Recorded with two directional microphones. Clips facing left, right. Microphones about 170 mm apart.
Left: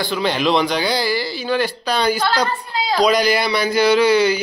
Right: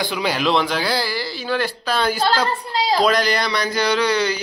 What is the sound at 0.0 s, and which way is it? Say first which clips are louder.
Speech: left 2 dB; 10° right (ahead or behind).